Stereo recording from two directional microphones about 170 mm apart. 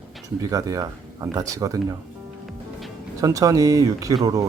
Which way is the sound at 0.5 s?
20° right (ahead or behind).